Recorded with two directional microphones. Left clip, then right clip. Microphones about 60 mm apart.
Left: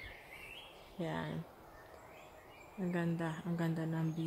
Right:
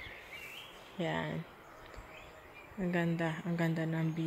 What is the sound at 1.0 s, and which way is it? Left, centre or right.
Speech, right.